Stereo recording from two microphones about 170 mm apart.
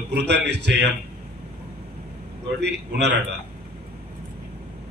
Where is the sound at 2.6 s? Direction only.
85° right.